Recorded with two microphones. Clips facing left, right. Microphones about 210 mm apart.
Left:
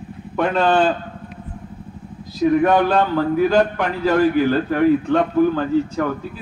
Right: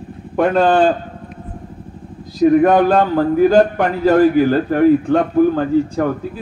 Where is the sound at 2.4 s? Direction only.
40° right (ahead or behind).